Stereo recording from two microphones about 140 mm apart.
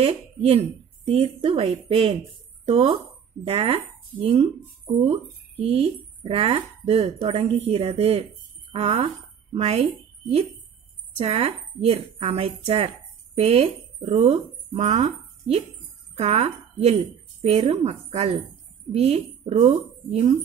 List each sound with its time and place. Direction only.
0.0 s speech: 45° right (ahead or behind)
11.1 s speech: 45° right (ahead or behind)